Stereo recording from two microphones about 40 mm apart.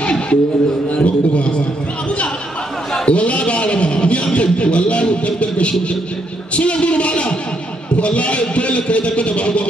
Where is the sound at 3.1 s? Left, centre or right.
Left.